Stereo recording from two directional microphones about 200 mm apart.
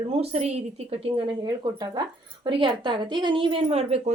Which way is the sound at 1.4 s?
20° right (ahead or behind).